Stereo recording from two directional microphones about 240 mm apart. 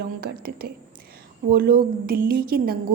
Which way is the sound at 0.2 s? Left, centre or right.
Right.